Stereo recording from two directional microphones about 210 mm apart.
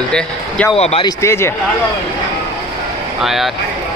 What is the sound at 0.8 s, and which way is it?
Speech, 30° left (ahead or behind).